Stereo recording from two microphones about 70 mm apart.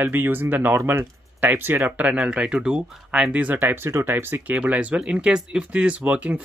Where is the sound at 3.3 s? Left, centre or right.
Right.